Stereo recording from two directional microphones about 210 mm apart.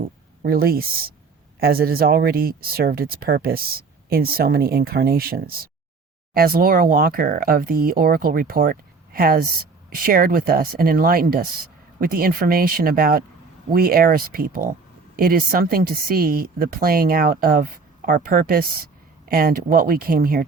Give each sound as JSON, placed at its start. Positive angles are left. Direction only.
{"t": 0.4, "sound": "speech", "side_deg": -45}